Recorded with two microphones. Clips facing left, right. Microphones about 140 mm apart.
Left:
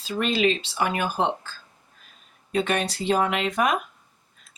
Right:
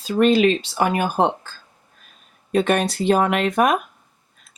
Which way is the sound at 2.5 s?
50° right (ahead or behind).